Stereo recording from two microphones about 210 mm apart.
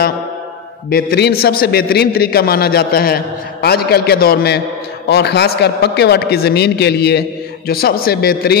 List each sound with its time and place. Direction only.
0.8 s a man's voice: 50° left (ahead or behind)